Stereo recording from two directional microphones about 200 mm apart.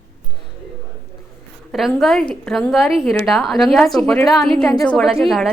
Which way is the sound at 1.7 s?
Centre (ahead or behind).